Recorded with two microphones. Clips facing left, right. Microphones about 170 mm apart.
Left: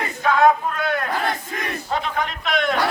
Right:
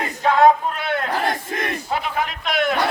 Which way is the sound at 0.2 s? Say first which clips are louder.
Right 2 dB; 30° right (ahead or behind).